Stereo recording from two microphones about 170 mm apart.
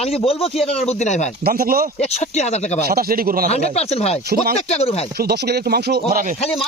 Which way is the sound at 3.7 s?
40° left (ahead or behind).